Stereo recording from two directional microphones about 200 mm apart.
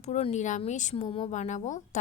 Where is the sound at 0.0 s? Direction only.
35° left (ahead or behind).